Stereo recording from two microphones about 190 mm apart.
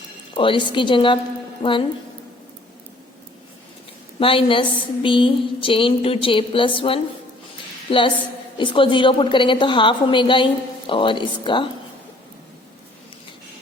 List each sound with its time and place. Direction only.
0.3 s a woman's voice: 25° left (ahead or behind)
4.2 s a woman's voice: 30° left (ahead or behind)